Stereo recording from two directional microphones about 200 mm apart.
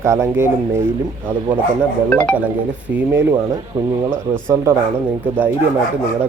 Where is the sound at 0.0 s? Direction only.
15° right (ahead or behind).